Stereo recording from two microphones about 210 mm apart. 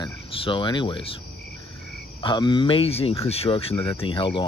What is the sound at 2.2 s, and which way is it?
Speech, 20° left (ahead or behind).